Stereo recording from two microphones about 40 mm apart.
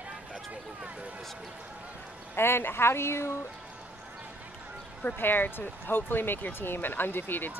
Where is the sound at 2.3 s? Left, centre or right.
Left.